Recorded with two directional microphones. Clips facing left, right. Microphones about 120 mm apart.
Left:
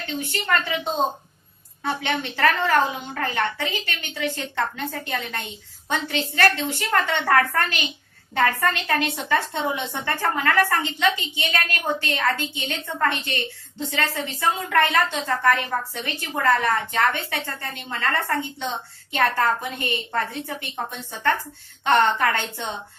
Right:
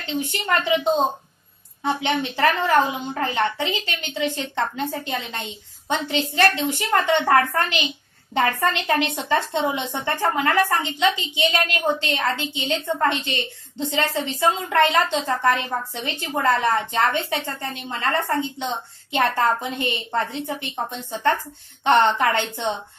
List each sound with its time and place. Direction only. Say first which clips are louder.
0.0 s a woman's voice: right 2 dB; 20° right (ahead or behind)
1.8 s a woman's voice: right 3 dB; 20° right (ahead or behind)